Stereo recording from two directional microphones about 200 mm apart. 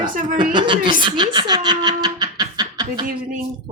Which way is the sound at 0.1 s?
40° right (ahead or behind).